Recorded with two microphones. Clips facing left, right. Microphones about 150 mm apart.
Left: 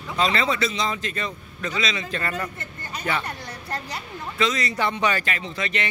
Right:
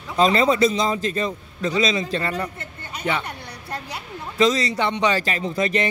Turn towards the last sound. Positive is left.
turn(degrees=-40)  # may be behind; listen again after turning